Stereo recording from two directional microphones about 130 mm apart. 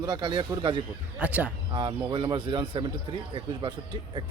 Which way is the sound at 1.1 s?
10° right (ahead or behind).